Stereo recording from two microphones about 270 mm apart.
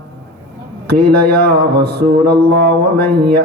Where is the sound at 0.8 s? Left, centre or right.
Right.